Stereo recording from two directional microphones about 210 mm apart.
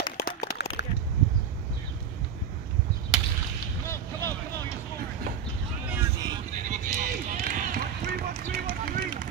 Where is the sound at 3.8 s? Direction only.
15° left (ahead or behind).